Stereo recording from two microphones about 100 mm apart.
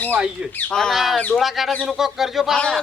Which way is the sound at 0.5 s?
5° left (ahead or behind).